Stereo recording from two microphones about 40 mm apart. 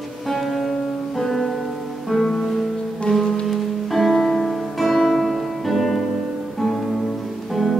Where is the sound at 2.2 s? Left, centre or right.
Centre.